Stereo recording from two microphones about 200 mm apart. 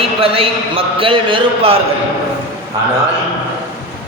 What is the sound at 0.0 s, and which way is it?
A man's voice, 30° right (ahead or behind).